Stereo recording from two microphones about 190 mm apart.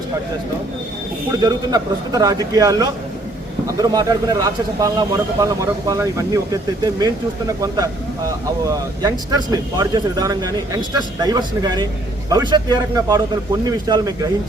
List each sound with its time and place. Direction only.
1.4 s speech: 20° right (ahead or behind)